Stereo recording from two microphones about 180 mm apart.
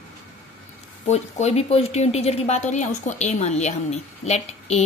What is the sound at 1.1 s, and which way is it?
A woman's voice, 40° left (ahead or behind).